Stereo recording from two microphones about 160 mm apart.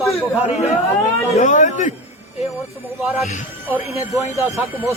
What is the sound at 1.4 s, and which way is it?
Speech, 50° left (ahead or behind).